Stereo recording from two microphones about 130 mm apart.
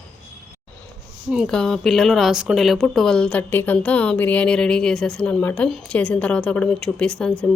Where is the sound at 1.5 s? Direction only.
5° left (ahead or behind).